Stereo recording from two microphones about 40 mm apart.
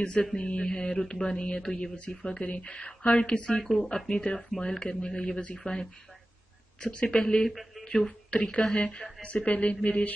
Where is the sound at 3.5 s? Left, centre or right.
Centre.